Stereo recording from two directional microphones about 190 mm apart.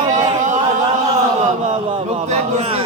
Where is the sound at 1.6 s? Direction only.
30° right (ahead or behind).